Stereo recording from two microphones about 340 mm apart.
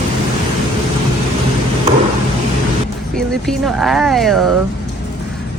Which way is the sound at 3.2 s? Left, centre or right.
Centre.